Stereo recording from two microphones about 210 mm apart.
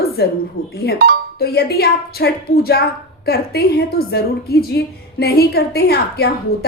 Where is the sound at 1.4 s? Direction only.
50° left (ahead or behind).